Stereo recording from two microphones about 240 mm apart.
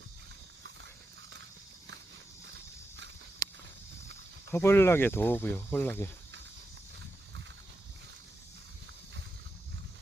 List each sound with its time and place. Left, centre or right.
4.5 s speech: centre